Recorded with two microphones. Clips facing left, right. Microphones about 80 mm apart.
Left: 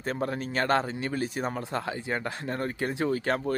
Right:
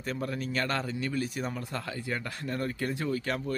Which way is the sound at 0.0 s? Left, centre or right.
Left.